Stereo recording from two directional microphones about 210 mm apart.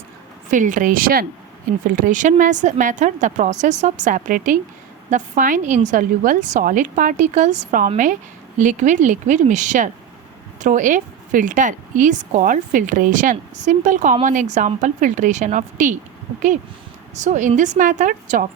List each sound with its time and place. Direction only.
0.5 s a woman's voice: 40° right (ahead or behind)
17.2 s a woman's voice: 35° right (ahead or behind)